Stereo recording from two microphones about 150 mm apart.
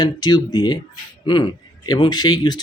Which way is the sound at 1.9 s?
30° left (ahead or behind).